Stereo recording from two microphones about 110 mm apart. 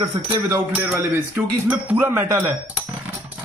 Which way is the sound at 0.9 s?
20° right (ahead or behind).